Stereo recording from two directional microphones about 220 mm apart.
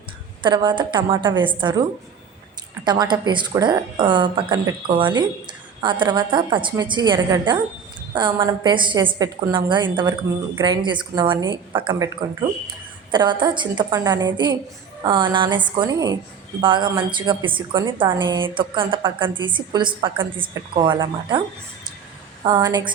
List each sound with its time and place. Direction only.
0.4 s a woman's voice: 20° right (ahead or behind)
2.8 s a woman's voice: 20° right (ahead or behind)
22.4 s a woman's voice: 20° right (ahead or behind)